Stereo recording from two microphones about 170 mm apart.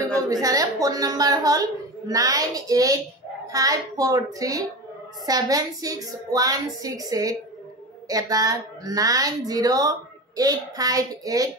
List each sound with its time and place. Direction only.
0.3 s speech: 20° right (ahead or behind)